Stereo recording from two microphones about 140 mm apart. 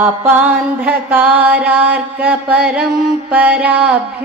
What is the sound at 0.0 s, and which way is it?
Music, 10° right (ahead or behind).